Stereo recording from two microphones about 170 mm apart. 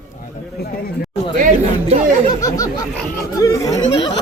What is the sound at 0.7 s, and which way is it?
Speech, 60° left (ahead or behind).